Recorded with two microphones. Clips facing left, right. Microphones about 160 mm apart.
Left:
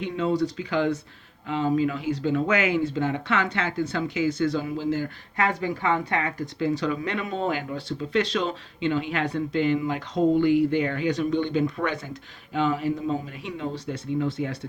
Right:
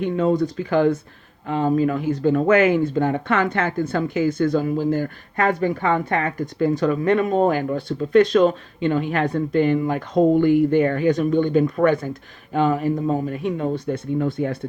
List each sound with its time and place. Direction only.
0.0 s speech: 50° right (ahead or behind)